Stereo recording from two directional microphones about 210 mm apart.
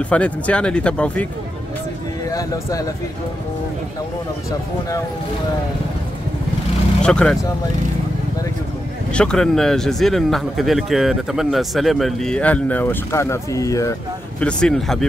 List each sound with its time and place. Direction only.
0.1 s speech: 5° left (ahead or behind)
2.3 s speech: 15° left (ahead or behind)
7.0 s speech: 5° left (ahead or behind)
9.1 s speech: 5° left (ahead or behind)
14.4 s speech: 5° left (ahead or behind)